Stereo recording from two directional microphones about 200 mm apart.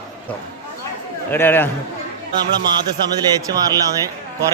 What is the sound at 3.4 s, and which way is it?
A man's voice, 15° right (ahead or behind).